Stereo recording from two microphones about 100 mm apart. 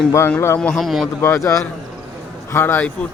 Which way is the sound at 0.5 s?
10° left (ahead or behind).